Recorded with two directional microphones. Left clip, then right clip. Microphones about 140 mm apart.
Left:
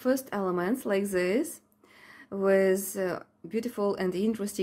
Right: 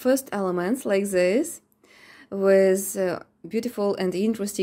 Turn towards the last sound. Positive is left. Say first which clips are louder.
# right 4 dB
turn(degrees=-25)  # may be behind; listen again after turning